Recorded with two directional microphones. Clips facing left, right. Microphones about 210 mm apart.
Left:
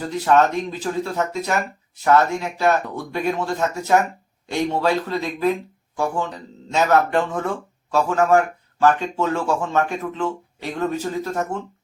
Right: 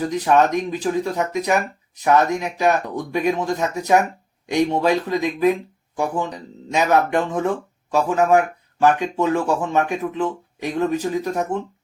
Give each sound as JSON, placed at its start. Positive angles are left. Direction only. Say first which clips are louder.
{"t": 0.1, "sound": "speech", "louder": "left 2 dB", "side_deg": -15}